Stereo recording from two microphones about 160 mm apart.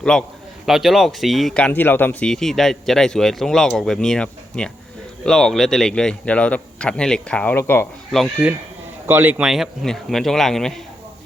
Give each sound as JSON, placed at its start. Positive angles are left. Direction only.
{"t": 0.0, "sound": "a man's voice", "side_deg": 5}
{"t": 8.4, "sound": "a man's voice", "side_deg": -10}
{"t": 9.4, "sound": "a man's voice", "side_deg": 0}